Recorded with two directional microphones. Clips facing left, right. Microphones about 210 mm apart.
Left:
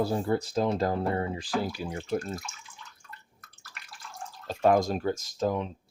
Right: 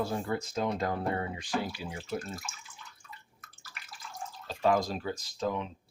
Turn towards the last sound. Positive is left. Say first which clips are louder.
# left 4 dB
turn(degrees=40)  # may be behind; listen again after turning